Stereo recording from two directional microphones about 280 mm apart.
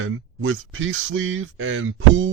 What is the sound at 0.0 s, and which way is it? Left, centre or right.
Speech, right.